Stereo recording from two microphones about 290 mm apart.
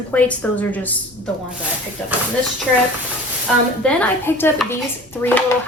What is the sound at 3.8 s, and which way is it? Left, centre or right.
Speech, centre.